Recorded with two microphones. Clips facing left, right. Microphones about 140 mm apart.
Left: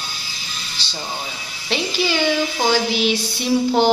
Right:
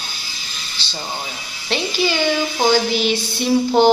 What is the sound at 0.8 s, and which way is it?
Speech, 40° left (ahead or behind).